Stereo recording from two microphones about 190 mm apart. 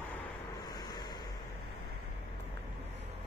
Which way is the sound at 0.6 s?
20° left (ahead or behind).